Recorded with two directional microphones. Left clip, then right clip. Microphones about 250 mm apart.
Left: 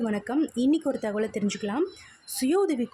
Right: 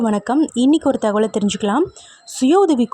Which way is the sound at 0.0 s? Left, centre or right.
Right.